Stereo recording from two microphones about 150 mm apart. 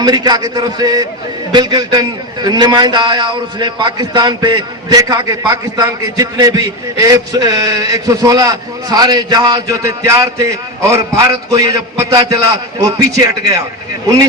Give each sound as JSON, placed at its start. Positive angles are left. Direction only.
{"t": 0.0, "sound": "a man's voice", "side_deg": -25}